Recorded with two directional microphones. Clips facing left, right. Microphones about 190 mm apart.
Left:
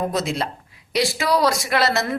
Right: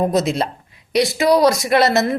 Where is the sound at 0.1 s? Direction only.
20° right (ahead or behind).